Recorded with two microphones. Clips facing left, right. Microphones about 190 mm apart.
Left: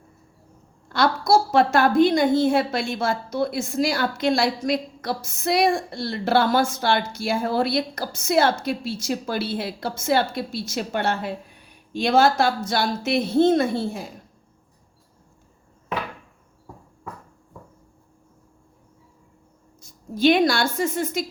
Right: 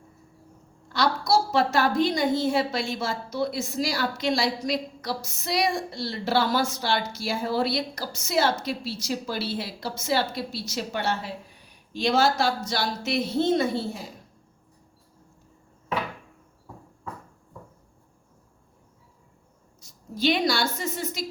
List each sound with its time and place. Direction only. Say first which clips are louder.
0.9 s a woman's voice: left 4 dB; 50° left (ahead or behind)
19.8 s a woman's voice: left 6 dB; 55° left (ahead or behind)